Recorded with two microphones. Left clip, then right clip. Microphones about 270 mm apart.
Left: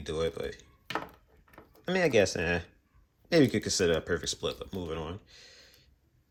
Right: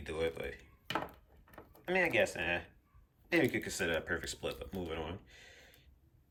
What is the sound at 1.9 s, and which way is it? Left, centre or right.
Speech, centre.